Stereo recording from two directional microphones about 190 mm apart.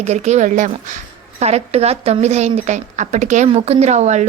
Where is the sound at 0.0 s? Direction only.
35° right (ahead or behind).